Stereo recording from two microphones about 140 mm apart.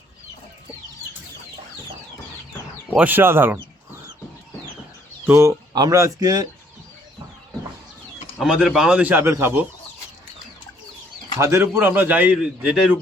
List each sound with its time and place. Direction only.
2.9 s speech: 10° right (ahead or behind)
5.2 s speech: 20° right (ahead or behind)
8.4 s speech: 5° right (ahead or behind)
11.3 s speech: 20° right (ahead or behind)